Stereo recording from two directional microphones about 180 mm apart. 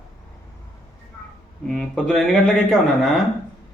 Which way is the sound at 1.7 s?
5° left (ahead or behind).